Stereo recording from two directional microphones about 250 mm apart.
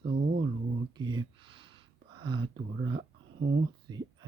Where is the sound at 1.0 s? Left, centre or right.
Centre.